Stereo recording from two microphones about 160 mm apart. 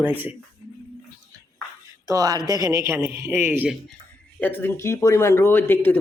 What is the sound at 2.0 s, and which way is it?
Speech, 20° right (ahead or behind).